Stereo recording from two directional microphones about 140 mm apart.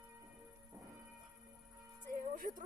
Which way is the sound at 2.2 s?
70° right (ahead or behind).